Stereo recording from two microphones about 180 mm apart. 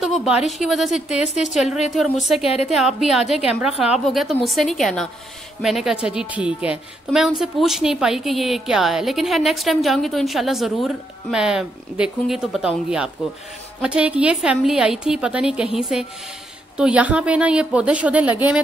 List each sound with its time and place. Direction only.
0.0 s a woman's voice: centre (ahead or behind)
2.4 s a woman's voice: 35° left (ahead or behind)
2.8 s a woman's voice: centre (ahead or behind)